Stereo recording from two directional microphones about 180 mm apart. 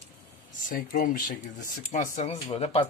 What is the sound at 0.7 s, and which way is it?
Speech, 50° left (ahead or behind).